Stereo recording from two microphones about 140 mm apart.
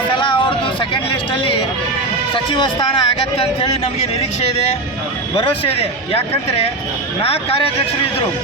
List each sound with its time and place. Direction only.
0.2 s a sound: 35° left (ahead or behind)
2.3 s speech: 40° left (ahead or behind)
5.4 s speech: 40° left (ahead or behind)